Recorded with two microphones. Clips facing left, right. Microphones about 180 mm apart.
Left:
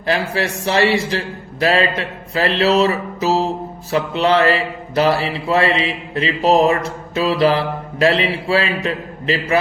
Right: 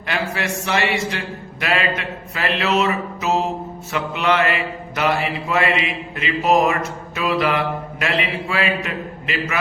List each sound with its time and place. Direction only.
0.0 s mantra: 35° left (ahead or behind)